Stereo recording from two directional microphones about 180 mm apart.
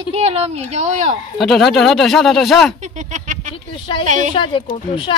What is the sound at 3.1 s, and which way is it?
A woman's voice, 45° right (ahead or behind).